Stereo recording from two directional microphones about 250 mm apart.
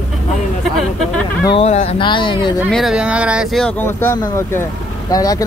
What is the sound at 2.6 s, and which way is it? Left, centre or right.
Speech, centre.